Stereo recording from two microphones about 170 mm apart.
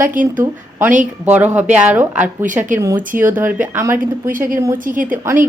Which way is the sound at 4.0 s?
55° right (ahead or behind).